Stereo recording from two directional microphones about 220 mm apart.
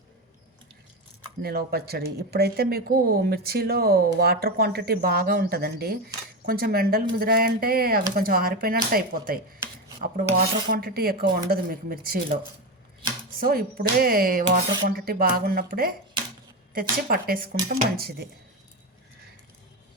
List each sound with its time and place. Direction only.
1.4 s speech: 45° right (ahead or behind)
13.4 s speech: 40° right (ahead or behind)